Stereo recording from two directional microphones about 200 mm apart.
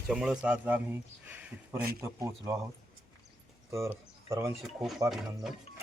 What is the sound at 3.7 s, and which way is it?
Speech, 15° right (ahead or behind).